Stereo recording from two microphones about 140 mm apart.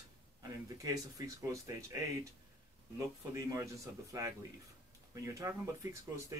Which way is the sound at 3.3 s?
20° right (ahead or behind).